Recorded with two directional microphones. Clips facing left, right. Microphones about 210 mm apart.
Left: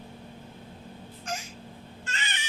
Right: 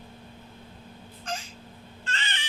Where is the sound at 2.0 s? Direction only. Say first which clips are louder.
Right 2 dB; 15° left (ahead or behind).